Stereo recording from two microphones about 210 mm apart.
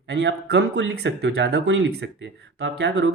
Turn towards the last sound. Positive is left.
turn(degrees=-55)  # may be behind; listen again after turning